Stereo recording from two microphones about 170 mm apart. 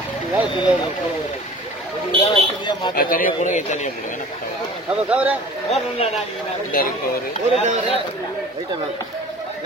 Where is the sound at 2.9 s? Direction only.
55° left (ahead or behind).